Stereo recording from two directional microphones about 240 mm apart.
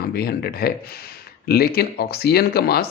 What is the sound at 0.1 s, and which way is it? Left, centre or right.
Speech, left.